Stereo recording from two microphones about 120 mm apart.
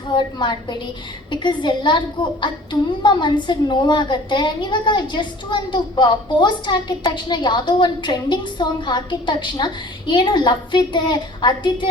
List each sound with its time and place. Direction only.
0.1 s a woman's voice: 40° left (ahead or behind)